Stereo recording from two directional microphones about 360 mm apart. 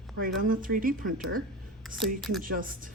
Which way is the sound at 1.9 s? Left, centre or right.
Centre.